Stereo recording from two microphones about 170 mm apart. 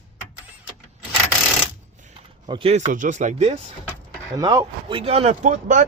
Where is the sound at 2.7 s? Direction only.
45° right (ahead or behind).